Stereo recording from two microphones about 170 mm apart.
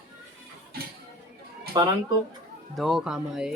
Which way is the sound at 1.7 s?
20° right (ahead or behind).